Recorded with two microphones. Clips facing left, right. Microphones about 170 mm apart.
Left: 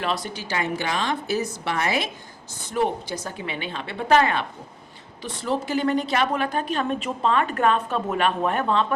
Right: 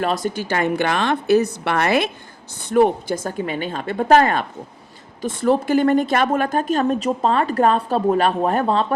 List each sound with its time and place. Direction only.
0.0 s a woman's voice: 45° right (ahead or behind)